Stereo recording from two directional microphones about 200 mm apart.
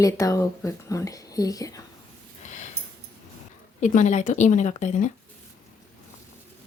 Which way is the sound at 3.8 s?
40° left (ahead or behind).